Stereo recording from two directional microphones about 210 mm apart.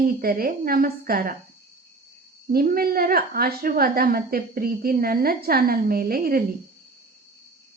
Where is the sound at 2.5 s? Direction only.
45° right (ahead or behind).